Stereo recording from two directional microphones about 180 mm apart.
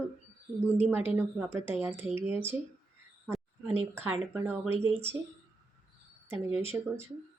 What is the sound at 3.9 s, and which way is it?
Speech, 15° right (ahead or behind).